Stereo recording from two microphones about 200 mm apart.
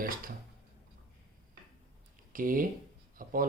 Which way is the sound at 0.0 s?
45° right (ahead or behind).